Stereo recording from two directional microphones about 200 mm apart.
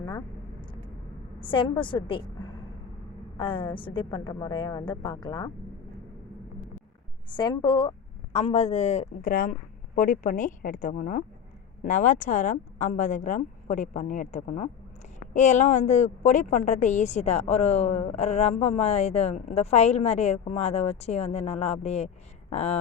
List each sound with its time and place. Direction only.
1.4 s a woman's voice: 25° left (ahead or behind)
7.3 s a woman's voice: 20° left (ahead or behind)